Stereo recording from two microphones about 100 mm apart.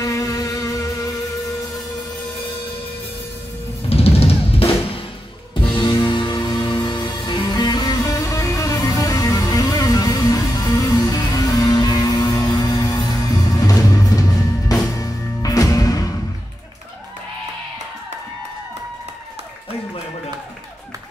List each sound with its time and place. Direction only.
0.0 s music: 35° left (ahead or behind)
3.9 s drum kit: 80° left
5.5 s music: 55° left (ahead or behind); by 16.1 s 35° left (ahead or behind)